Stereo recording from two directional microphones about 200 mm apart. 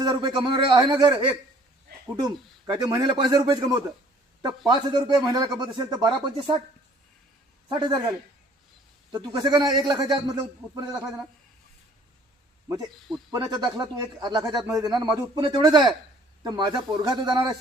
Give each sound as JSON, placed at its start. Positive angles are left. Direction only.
{"t": 0.0, "sound": "speech", "side_deg": -20}
{"t": 7.7, "sound": "speech", "side_deg": -20}
{"t": 9.1, "sound": "speech", "side_deg": -20}
{"t": 13.3, "sound": "speech", "side_deg": -20}